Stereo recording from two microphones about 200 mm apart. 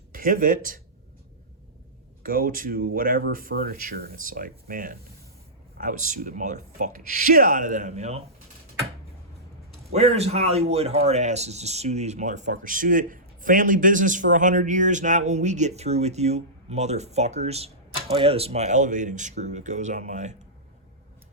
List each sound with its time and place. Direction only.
0.1 s speech: 45° right (ahead or behind)
2.2 s speech: 45° right (ahead or behind)
9.9 s speech: 30° right (ahead or behind)